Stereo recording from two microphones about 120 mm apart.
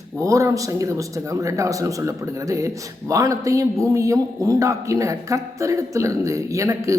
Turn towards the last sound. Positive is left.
turn(degrees=-25)  # may be behind; listen again after turning